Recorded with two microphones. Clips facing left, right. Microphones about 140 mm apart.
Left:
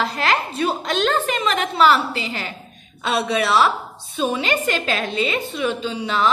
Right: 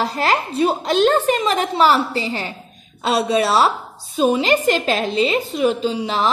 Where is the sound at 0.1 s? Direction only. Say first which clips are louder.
Right 2 dB; 35° right (ahead or behind).